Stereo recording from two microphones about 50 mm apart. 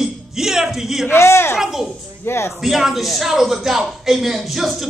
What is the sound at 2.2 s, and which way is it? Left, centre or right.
Speech, left.